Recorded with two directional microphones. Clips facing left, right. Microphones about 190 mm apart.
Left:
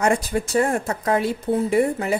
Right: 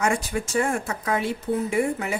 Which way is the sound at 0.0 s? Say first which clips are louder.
Left 4 dB; 35° left (ahead or behind).